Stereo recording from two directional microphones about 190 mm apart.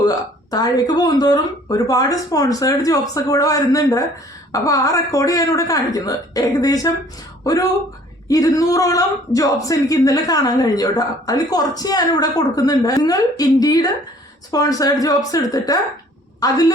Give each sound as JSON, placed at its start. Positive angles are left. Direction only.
{"t": 0.5, "sound": "a woman's voice", "side_deg": 20}